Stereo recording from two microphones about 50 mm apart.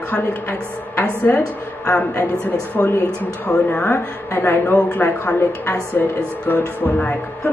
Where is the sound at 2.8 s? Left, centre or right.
Left.